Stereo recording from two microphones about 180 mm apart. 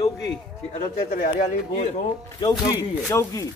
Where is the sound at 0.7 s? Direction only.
45° left (ahead or behind).